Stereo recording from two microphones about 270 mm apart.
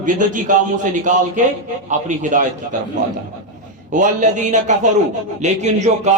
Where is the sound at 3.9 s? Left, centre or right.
Right.